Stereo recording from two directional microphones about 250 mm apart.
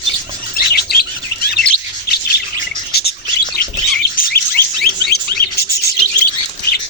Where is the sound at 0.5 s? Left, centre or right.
Left.